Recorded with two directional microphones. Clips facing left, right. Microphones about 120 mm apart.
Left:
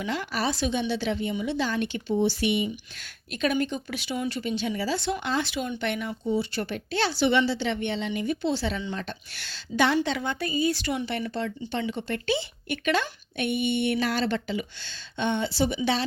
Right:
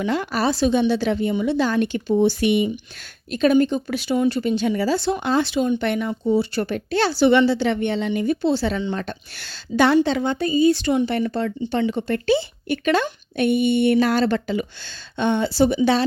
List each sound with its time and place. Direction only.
0.0 s speech: 50° right (ahead or behind)
3.3 s speech: 35° right (ahead or behind); by 4.9 s 50° right (ahead or behind)
4.9 s speech: 35° right (ahead or behind)
7.3 s speech: 55° right (ahead or behind)
10.0 s speech: 30° right (ahead or behind)
11.1 s speech: 50° right (ahead or behind)